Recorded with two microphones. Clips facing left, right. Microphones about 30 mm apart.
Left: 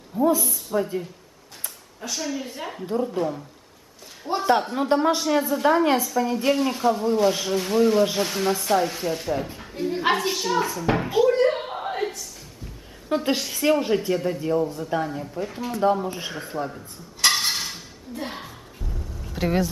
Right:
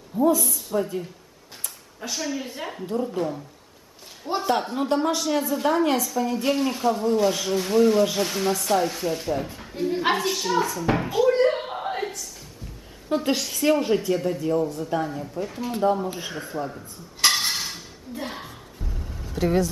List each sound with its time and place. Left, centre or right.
0.1 s a woman's voice: centre
2.0 s speech: centre
4.5 s a woman's voice: centre
11.2 s a sound: centre
13.1 s a woman's voice: centre
17.3 s dishes: centre
19.3 s speech: centre